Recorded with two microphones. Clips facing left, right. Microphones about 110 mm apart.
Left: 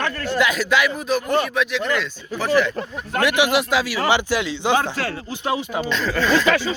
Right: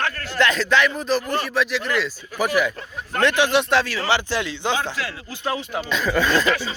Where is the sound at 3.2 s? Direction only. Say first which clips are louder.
Even; 10° left (ahead or behind).